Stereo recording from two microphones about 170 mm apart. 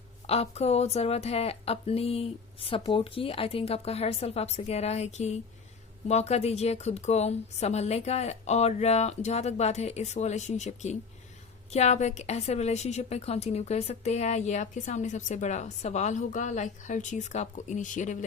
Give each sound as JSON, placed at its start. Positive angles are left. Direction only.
{"t": 0.3, "sound": "a woman's voice", "side_deg": 35}